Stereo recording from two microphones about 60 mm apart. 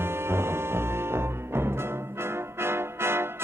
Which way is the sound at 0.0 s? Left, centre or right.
Right.